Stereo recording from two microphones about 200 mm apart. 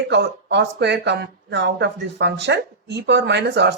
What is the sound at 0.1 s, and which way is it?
Speech, 60° right (ahead or behind).